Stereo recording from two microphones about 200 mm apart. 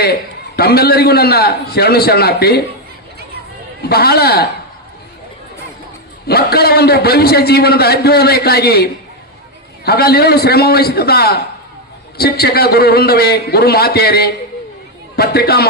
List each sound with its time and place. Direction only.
0.0 s a man's voice: 55° left (ahead or behind)
3.8 s a man's voice: 50° left (ahead or behind)
6.2 s a man's voice: 50° left (ahead or behind)